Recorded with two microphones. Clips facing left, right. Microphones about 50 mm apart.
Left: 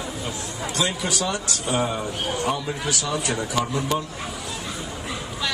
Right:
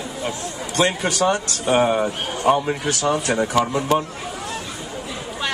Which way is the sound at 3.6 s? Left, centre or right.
Right.